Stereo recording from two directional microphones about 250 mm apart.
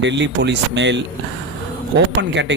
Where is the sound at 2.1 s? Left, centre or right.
Right.